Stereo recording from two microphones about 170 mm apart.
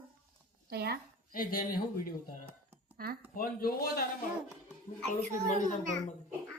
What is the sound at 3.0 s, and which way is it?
Speech, 65° right (ahead or behind).